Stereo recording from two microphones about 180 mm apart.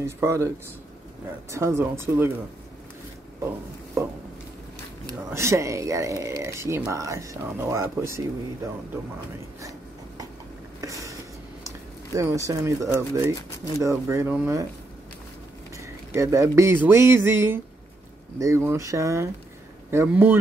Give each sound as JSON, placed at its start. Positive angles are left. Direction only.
{"t": 0.0, "sound": "speech", "side_deg": -15}
{"t": 1.5, "sound": "speech", "side_deg": -15}
{"t": 4.0, "sound": "speech", "side_deg": -15}
{"t": 5.3, "sound": "speech", "side_deg": -15}
{"t": 10.8, "sound": "a sound", "side_deg": -20}
{"t": 11.6, "sound": "speech", "side_deg": -15}
{"t": 15.8, "sound": "speech", "side_deg": -15}